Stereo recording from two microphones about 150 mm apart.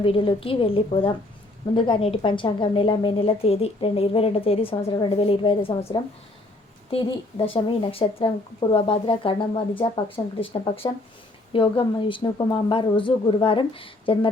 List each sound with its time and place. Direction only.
0.0 s a woman's voice: 35° left (ahead or behind)
6.9 s a woman's voice: 35° left (ahead or behind)